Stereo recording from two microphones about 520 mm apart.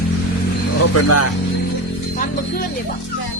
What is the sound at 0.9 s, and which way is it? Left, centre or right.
Speech, left.